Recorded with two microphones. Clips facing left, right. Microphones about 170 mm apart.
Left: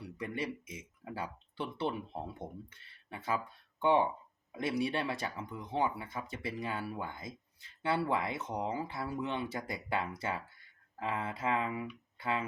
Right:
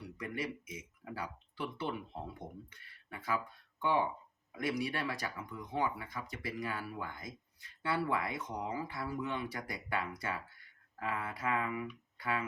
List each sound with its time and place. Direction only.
0.2 s speech: 25° left (ahead or behind)
2.8 s a sound: 25° left (ahead or behind)
4.5 s speech: 25° left (ahead or behind)